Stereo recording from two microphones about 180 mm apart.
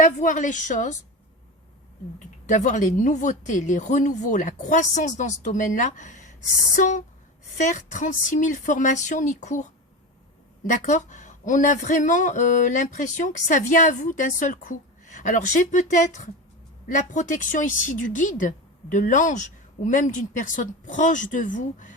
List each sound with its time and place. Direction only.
0.0 s speech: 45° left (ahead or behind)
2.5 s speech: 45° left (ahead or behind)